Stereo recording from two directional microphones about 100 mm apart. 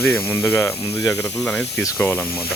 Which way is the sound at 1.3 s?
10° left (ahead or behind).